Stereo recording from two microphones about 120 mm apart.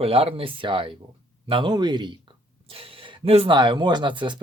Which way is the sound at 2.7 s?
50° right (ahead or behind).